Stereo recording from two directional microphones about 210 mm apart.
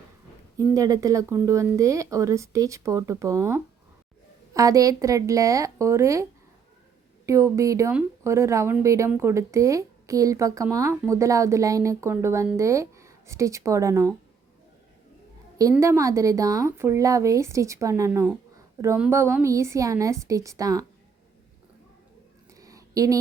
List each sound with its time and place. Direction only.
0.5 s speech: 15° right (ahead or behind)
7.3 s speech: 15° right (ahead or behind)
15.7 s speech: 15° right (ahead or behind)
22.5 s a sound: 15° right (ahead or behind)